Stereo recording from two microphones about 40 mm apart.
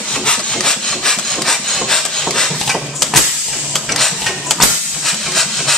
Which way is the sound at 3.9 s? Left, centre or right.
Centre.